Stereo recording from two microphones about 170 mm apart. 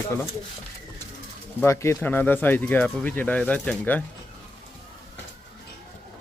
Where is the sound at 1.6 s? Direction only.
15° left (ahead or behind).